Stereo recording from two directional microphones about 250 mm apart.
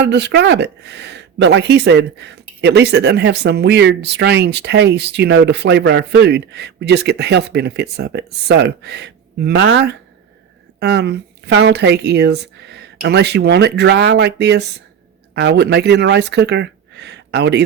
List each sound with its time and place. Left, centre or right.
0.0 s speech: right